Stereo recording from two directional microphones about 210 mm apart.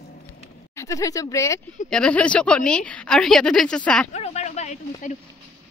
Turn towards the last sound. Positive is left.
turn(degrees=35)  # may be behind; listen again after turning